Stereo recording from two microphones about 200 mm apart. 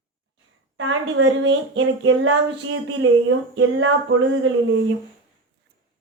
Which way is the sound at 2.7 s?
85° right.